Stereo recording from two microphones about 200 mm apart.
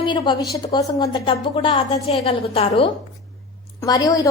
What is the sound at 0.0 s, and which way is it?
A woman's voice, 25° left (ahead or behind).